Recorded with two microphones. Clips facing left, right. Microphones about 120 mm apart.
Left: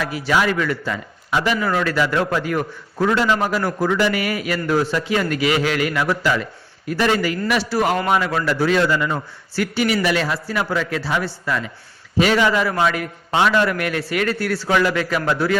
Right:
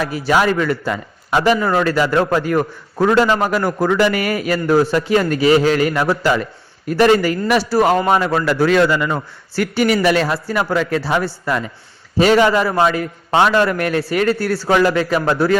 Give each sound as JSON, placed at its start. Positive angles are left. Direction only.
{"t": 0.0, "sound": "a man's voice", "side_deg": -45}
{"t": 0.9, "sound": "speech", "side_deg": -55}
{"t": 1.5, "sound": "a man's voice", "side_deg": -40}